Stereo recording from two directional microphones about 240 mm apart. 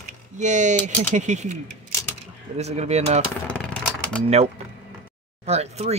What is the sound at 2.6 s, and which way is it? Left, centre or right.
Speech, right.